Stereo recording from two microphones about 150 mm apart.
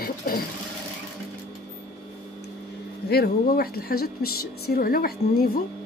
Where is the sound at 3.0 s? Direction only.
90° left.